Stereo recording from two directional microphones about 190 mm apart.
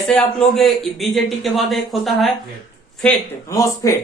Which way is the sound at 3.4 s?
15° left (ahead or behind).